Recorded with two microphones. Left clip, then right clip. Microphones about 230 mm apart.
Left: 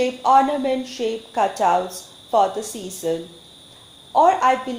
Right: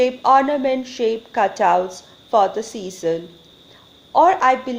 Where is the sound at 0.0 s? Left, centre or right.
Right.